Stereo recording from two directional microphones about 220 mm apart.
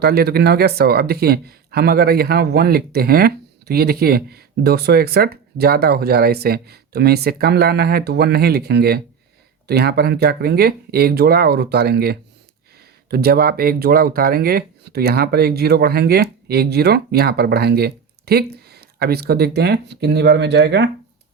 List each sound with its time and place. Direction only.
0.0 s speech: 45° right (ahead or behind)